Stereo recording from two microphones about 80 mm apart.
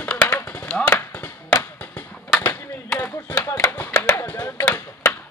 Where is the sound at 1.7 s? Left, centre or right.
Left.